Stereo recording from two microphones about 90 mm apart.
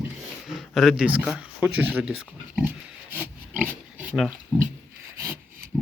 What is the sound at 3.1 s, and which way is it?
Pig, 25° right (ahead or behind).